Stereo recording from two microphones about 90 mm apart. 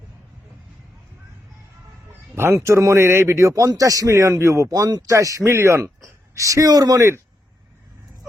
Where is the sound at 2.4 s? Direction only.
30° right (ahead or behind); by 7.0 s 45° right (ahead or behind).